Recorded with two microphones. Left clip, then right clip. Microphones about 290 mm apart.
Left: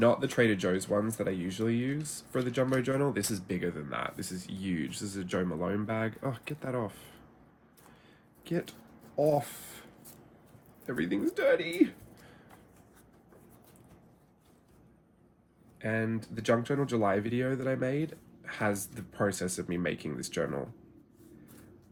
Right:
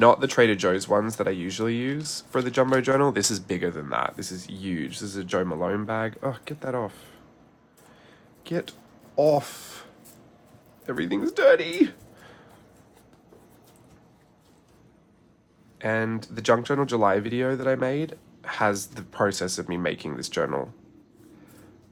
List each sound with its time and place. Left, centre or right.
0.0 s speech: centre
8.4 s speech: centre
10.8 s speech: centre
15.8 s speech: centre